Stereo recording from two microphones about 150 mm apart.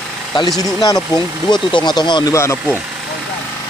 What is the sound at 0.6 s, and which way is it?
Speech, 25° left (ahead or behind).